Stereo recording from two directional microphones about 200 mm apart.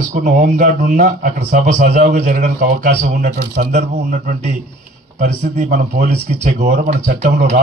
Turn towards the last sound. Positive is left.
turn(degrees=-45)  # may be behind; listen again after turning